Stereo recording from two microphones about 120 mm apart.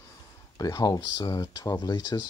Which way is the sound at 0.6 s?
30° left (ahead or behind).